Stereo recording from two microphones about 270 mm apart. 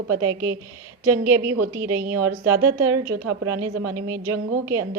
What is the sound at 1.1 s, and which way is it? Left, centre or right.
Speech, centre.